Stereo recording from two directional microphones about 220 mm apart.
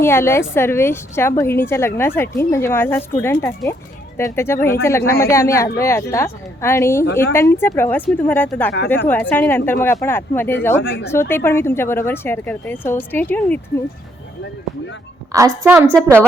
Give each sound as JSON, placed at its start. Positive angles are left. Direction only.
{"t": 0.0, "sound": "a woman's voice", "side_deg": 10}
{"t": 10.8, "sound": "speech", "side_deg": 50}
{"t": 11.1, "sound": "a woman's voice", "side_deg": 10}
{"t": 15.3, "sound": "a woman's voice", "side_deg": -15}